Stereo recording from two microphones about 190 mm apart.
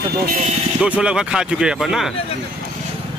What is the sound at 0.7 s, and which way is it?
A man's voice, 5° right (ahead or behind).